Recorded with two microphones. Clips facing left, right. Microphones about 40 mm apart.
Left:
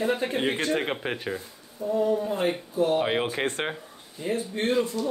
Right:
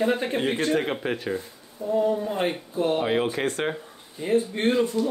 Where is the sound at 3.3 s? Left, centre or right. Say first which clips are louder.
Right 2 dB; left.